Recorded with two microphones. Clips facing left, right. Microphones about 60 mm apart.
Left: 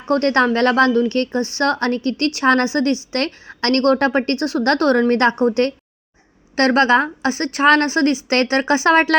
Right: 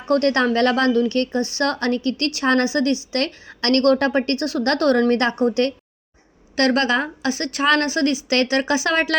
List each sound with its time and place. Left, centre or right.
0.1 s a woman's voice: left